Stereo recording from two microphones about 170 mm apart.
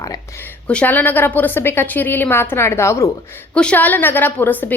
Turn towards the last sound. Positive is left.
turn(degrees=10)  # may be behind; listen again after turning